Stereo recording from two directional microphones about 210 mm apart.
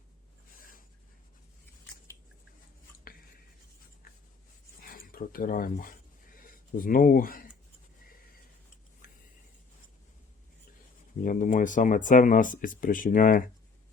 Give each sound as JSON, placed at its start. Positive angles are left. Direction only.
{"t": 0.6, "sound": "writing", "side_deg": 40}
{"t": 4.8, "sound": "speech", "side_deg": 45}
{"t": 11.2, "sound": "speech", "side_deg": 40}